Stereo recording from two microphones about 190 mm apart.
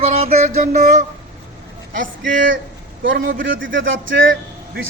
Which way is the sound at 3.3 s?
85° right.